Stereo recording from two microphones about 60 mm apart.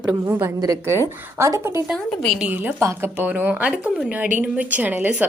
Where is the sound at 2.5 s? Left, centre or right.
Right.